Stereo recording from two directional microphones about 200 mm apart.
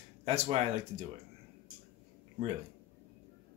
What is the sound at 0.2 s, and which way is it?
Speech, 30° right (ahead or behind).